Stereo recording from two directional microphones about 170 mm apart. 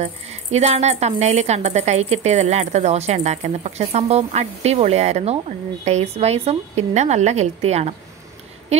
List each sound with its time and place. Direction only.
0.0 s a woman's voice: 40° right (ahead or behind)